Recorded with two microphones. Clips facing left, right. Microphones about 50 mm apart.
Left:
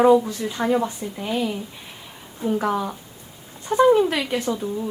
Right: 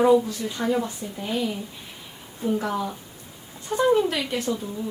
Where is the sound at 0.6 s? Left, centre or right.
Left.